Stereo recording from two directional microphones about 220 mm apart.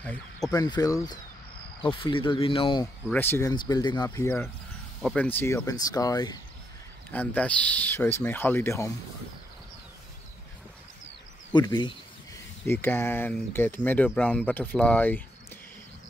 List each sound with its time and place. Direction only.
0.0 s speech: 5° left (ahead or behind); by 2.9 s 20° left (ahead or behind)
3.1 s speech: 10° left (ahead or behind)
7.1 s speech: 5° left (ahead or behind)
11.5 s speech: 20° left (ahead or behind)
12.6 s speech: 10° left (ahead or behind)